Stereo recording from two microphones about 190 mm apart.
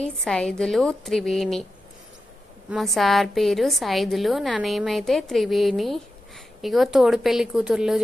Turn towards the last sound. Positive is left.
turn(degrees=-5)  # may be behind; listen again after turning